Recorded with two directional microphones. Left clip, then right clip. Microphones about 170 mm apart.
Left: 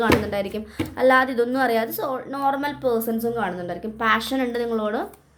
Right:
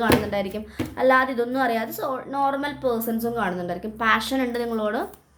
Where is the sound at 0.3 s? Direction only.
15° left (ahead or behind).